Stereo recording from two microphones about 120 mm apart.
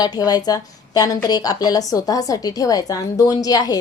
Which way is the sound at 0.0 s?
35° left (ahead or behind).